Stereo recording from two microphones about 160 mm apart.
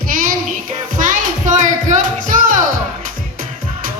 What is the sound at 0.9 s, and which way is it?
Music, 55° right (ahead or behind).